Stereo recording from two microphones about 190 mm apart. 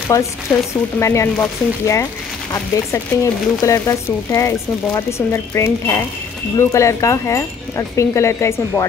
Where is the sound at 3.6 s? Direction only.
15° left (ahead or behind).